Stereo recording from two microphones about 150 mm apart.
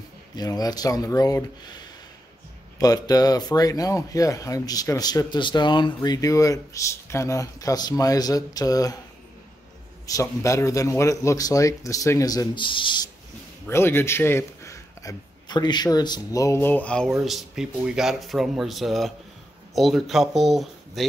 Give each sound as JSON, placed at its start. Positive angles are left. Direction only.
{"t": 0.4, "sound": "speech", "side_deg": 25}
{"t": 2.8, "sound": "speech", "side_deg": 25}
{"t": 10.0, "sound": "speech", "side_deg": 20}
{"t": 13.7, "sound": "a man's voice", "side_deg": 15}